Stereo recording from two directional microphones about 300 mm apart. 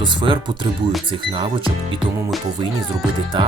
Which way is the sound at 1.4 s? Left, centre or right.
Centre.